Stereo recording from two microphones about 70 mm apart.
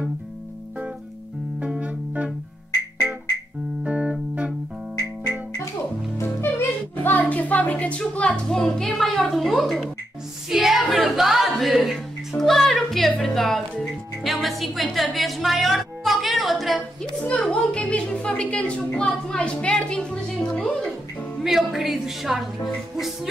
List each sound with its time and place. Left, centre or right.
1.6 s music: centre
3.8 s music: centre
4.9 s music: right
6.5 s music: left
7.0 s a sound: left
8.1 s speech: centre
10.5 s music: centre
13.2 s speech: centre
16.0 s music: centre
17.2 s a woman's voice: centre
21.4 s speech: centre